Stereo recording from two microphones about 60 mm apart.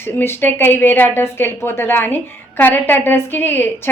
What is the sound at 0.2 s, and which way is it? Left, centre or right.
A woman's voice, left.